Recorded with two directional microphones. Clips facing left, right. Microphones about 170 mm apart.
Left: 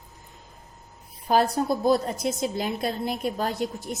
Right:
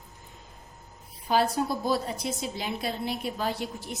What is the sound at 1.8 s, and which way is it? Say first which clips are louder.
A woman's voice: left 6 dB; 45° left (ahead or behind).